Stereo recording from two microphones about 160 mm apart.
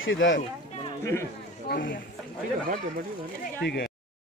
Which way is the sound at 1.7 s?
60° left (ahead or behind).